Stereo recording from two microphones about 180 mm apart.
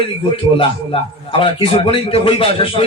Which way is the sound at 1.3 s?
30° left (ahead or behind).